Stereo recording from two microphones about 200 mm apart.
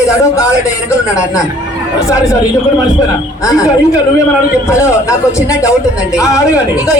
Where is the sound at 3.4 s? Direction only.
15° left (ahead or behind).